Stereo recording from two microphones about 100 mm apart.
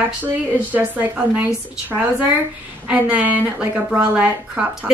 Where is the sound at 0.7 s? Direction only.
15° right (ahead or behind).